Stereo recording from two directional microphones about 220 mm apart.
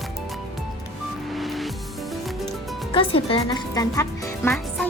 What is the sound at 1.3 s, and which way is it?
Music, centre (ahead or behind).